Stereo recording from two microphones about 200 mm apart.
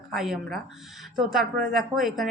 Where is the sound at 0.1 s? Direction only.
Centre (ahead or behind).